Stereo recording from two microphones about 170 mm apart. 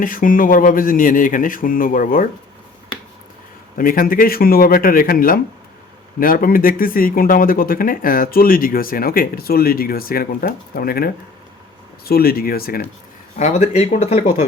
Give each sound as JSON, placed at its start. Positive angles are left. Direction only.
{"t": 0.0, "sound": "speech", "side_deg": 55}
{"t": 3.8, "sound": "speech", "side_deg": 55}
{"t": 13.3, "sound": "speech", "side_deg": 45}